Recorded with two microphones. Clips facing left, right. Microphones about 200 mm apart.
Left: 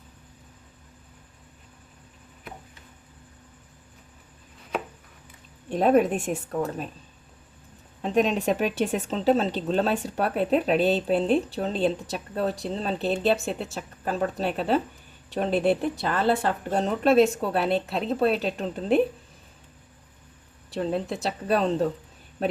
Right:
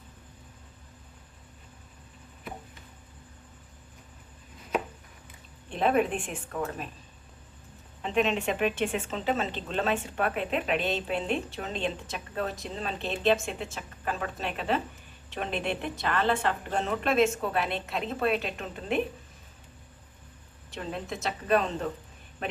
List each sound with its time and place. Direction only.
5.7 s speech: 40° left (ahead or behind)
8.0 s speech: 40° left (ahead or behind)
20.7 s speech: 35° left (ahead or behind)